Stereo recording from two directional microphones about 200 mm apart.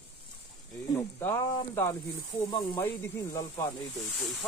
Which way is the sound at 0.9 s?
15° left (ahead or behind).